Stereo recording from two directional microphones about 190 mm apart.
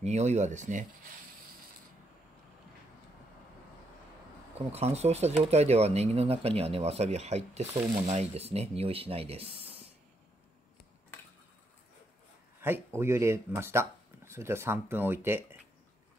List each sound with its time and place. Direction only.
0.0 s speech: 35° right (ahead or behind)
4.6 s speech: 35° right (ahead or behind)
12.6 s speech: 10° right (ahead or behind)